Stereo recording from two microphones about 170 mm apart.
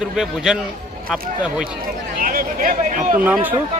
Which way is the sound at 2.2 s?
55° right (ahead or behind).